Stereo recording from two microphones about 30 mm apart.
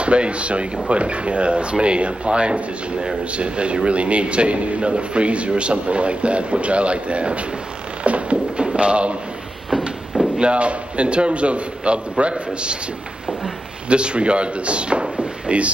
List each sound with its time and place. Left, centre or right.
0.0 s a man's voice: right
8.0 s a sound: right
8.7 s a man's voice: right
9.7 s a sound: centre
10.4 s a man's voice: right
13.8 s speech: right